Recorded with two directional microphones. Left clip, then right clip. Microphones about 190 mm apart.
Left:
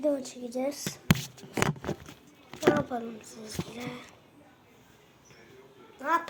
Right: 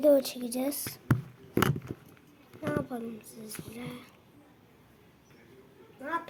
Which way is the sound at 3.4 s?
50° right (ahead or behind).